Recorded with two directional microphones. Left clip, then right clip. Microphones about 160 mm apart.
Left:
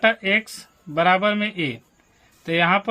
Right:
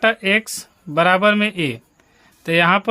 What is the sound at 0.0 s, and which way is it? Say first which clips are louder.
Speech: right 2 dB; 45° right (ahead or behind).